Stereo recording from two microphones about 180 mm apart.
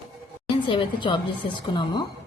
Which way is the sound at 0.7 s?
30° left (ahead or behind).